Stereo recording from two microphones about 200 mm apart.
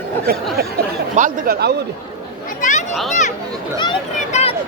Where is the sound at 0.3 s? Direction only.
50° right (ahead or behind).